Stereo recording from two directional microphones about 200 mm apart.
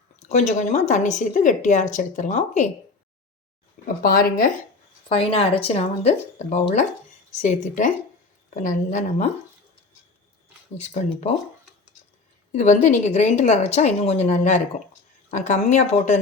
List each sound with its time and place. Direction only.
0.3 s speech: 35° left (ahead or behind)
4.0 s speech: 45° left (ahead or behind)
5.0 s speech: 30° left (ahead or behind)
10.8 s speech: 35° left (ahead or behind)
12.5 s speech: 35° left (ahead or behind)